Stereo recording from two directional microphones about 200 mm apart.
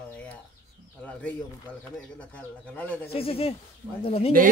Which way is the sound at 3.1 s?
30° left (ahead or behind).